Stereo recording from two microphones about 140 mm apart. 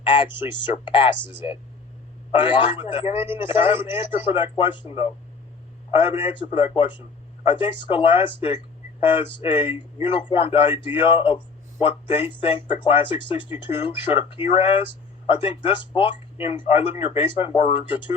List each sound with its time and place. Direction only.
0.1 s speech: 35° left (ahead or behind)